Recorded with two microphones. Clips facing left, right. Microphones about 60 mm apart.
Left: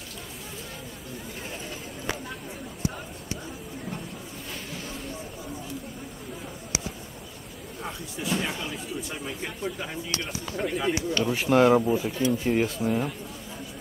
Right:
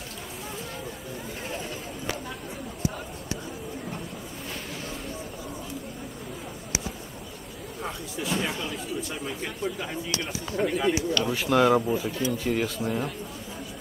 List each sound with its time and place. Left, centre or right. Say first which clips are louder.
8.2 s speech: even; centre
11.3 s speech: left 2 dB; left
11.8 s speech: left 2 dB; centre
12.3 s speech: left 4 dB; left
12.8 s speech: left 2 dB; centre